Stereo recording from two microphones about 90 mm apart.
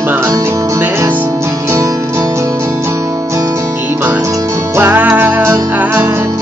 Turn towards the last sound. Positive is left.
turn(degrees=-30)  # may be behind; listen again after turning